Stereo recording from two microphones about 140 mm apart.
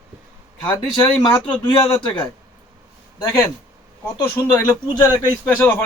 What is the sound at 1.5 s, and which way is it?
Speech, 35° left (ahead or behind).